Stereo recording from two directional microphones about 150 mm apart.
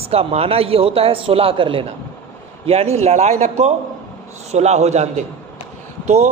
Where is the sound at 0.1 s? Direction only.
45° right (ahead or behind).